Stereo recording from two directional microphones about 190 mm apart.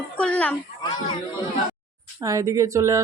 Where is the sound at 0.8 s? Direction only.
20° left (ahead or behind).